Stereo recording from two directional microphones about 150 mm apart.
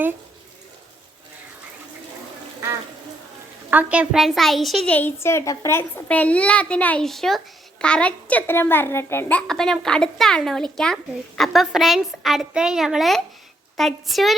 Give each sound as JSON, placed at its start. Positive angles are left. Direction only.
{"t": 3.7, "sound": "speech", "side_deg": -10}
{"t": 4.9, "sound": "a child's voice", "side_deg": 15}
{"t": 9.5, "sound": "speech", "side_deg": 5}